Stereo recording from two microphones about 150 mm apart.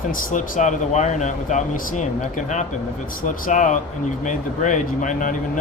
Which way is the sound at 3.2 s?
60° left (ahead or behind).